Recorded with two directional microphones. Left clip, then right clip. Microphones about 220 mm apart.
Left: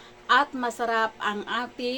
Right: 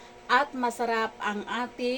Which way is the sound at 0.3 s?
15° left (ahead or behind).